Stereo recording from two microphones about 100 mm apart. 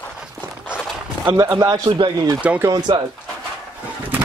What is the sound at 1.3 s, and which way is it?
Speech, 35° right (ahead or behind).